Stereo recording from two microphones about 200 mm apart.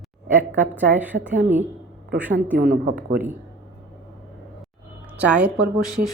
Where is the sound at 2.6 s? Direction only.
60° right (ahead or behind).